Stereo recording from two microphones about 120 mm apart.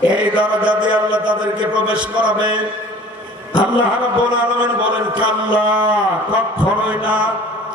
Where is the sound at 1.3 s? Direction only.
10° right (ahead or behind).